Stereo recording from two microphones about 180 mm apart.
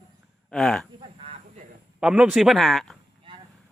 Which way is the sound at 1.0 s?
35° right (ahead or behind).